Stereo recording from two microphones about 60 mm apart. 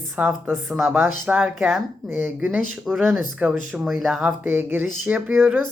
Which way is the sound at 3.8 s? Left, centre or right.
Centre.